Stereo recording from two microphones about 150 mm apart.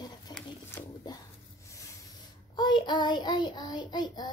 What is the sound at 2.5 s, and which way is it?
Speech, 30° left (ahead or behind).